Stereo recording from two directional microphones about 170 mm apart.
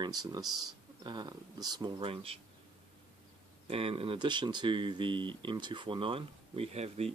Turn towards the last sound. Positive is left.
turn(degrees=-40)  # may be behind; listen again after turning